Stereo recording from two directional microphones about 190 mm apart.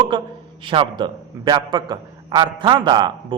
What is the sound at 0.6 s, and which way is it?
A man's voice, 25° right (ahead or behind).